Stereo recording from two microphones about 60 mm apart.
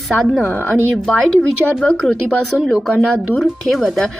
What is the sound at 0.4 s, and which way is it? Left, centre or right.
Speech, left.